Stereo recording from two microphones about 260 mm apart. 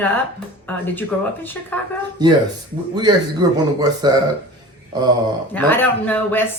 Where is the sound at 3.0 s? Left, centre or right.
Centre.